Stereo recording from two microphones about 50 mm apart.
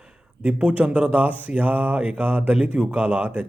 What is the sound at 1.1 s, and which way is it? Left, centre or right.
Mantra, right.